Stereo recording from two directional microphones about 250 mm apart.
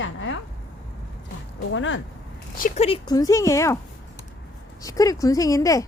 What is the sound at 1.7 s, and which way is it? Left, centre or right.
Speech, left.